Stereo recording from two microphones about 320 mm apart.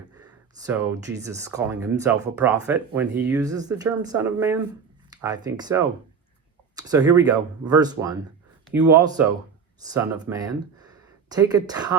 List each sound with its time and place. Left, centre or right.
0.2 s a sound: centre
1.0 s speech: centre
8.8 s speech: right
9.8 s speech: centre